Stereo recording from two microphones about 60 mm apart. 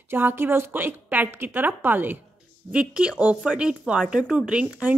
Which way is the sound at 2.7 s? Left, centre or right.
Centre.